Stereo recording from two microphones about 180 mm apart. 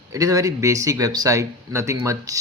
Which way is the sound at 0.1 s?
20° right (ahead or behind).